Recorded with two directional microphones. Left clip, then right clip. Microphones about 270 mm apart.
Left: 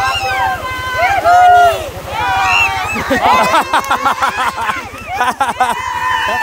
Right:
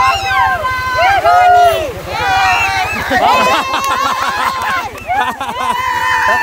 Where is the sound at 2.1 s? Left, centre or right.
Right.